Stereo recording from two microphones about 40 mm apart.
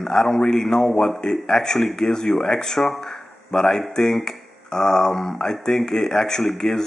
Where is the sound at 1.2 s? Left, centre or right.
Centre.